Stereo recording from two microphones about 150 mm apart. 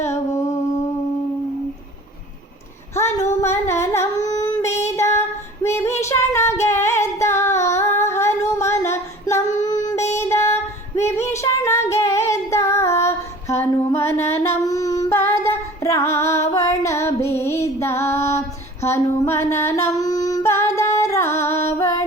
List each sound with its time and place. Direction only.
0.0 s a sound: 20° left (ahead or behind)
2.9 s singing: 20° left (ahead or behind)
5.6 s female singing: 20° left (ahead or behind)
9.5 s female singing: 55° left (ahead or behind)
10.2 s female singing: 20° left (ahead or behind)